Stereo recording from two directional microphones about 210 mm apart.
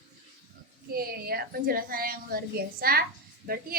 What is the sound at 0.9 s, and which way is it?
A woman's voice, 45° right (ahead or behind).